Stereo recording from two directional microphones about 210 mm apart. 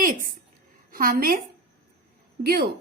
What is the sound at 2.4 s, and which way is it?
Speech, 50° right (ahead or behind).